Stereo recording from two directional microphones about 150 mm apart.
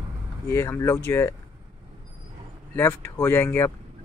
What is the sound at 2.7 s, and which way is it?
Speech, 15° left (ahead or behind).